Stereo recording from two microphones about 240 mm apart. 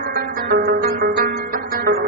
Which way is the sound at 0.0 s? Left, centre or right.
Right.